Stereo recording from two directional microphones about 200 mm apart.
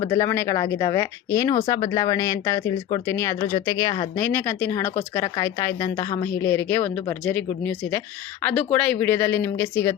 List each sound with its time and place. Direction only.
0.0 s speech: 15° left (ahead or behind)